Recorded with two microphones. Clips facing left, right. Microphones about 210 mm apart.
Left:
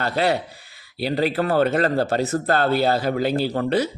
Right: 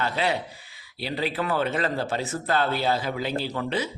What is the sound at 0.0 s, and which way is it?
Speech, 40° left (ahead or behind).